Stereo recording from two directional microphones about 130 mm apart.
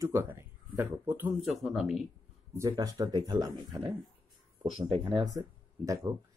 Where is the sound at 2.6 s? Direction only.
25° right (ahead or behind).